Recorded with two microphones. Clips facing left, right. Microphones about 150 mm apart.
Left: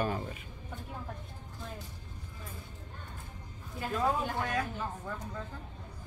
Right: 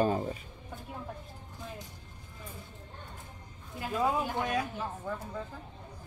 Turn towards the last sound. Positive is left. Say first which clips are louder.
# right 3 dB
turn(degrees=-10)  # may be behind; listen again after turning